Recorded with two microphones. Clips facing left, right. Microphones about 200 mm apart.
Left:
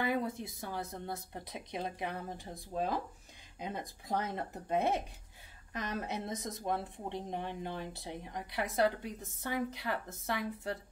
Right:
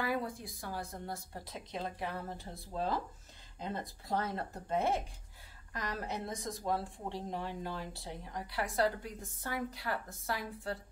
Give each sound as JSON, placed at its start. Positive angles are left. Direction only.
{"t": 0.0, "sound": "speech", "side_deg": 20}